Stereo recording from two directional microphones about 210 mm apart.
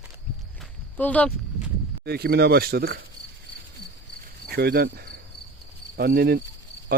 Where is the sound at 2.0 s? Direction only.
50° right (ahead or behind).